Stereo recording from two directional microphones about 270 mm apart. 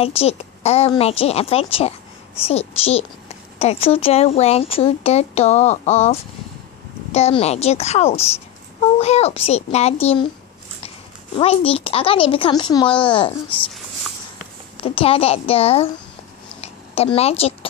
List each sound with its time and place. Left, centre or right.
0.0 s speech: left
11.3 s speech: left
14.8 s speech: left
16.6 s a sound: left